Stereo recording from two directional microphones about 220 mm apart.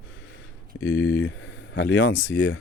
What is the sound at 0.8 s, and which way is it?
Speech, 55° left (ahead or behind).